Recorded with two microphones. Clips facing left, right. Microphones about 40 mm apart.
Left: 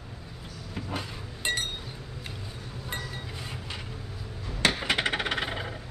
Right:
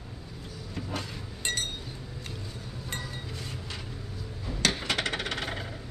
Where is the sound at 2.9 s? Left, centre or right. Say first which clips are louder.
Left 2 dB; centre.